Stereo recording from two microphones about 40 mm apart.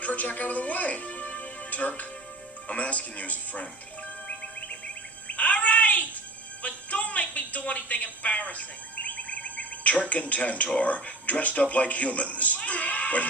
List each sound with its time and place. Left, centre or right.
0.0 s a man's voice: left
5.3 s a sound: left
6.6 s music: left
11.7 s a man's voice: left